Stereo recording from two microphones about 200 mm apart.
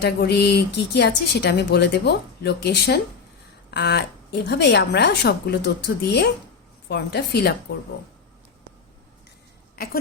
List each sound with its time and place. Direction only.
0.0 s speech: 55° left (ahead or behind)
9.7 s speech: 50° left (ahead or behind)